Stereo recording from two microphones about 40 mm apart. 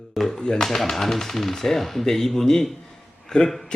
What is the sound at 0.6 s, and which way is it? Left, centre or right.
Speech, centre.